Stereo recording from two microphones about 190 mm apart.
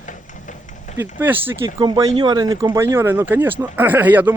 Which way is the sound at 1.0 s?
10° right (ahead or behind).